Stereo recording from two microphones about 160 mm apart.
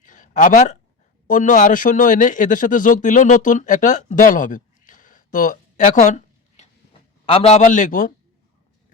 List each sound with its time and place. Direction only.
0.0 s a sound: 55° left (ahead or behind)
1.3 s a man's voice: 50° left (ahead or behind)
7.3 s a man's voice: 35° left (ahead or behind); by 8.1 s 55° left (ahead or behind)